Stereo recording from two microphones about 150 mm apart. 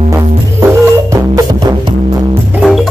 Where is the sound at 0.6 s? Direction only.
25° right (ahead or behind).